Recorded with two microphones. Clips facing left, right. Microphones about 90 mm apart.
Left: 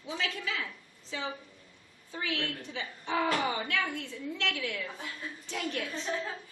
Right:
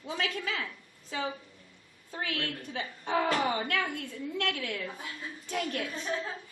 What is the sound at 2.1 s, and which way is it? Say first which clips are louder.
A woman's voice: even; 50° right (ahead or behind).